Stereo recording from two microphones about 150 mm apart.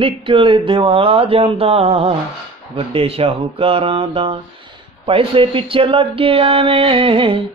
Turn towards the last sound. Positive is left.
turn(degrees=-35)  # may be behind; listen again after turning